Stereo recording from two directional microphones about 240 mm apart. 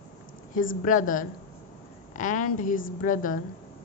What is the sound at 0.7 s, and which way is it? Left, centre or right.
A woman's voice, left.